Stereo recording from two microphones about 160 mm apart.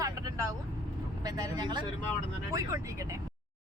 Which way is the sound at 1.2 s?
25° right (ahead or behind).